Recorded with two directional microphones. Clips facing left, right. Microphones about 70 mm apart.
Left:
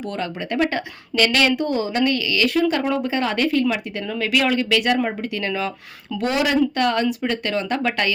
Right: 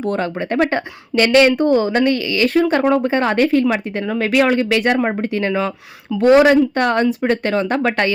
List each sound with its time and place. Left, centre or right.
0.0 s speech: right